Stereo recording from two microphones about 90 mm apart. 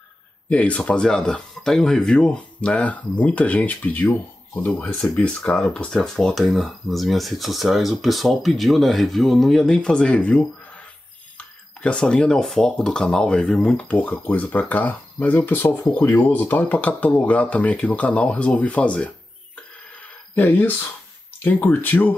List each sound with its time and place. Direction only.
0.5 s speech: 15° left (ahead or behind)